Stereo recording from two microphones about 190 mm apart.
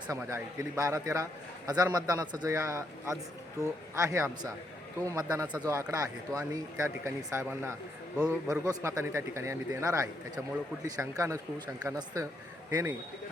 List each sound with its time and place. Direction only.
0.1 s a man's voice: 15° right (ahead or behind)